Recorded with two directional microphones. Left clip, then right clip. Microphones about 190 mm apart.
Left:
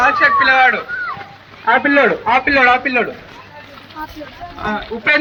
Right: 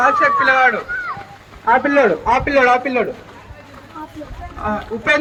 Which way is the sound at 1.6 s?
60° right (ahead or behind).